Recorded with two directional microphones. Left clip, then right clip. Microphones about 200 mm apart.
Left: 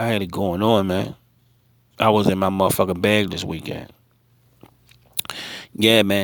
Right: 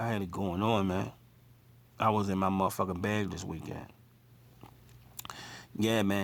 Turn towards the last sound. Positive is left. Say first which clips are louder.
# left 14 dB
turn(degrees=35)  # may be behind; listen again after turning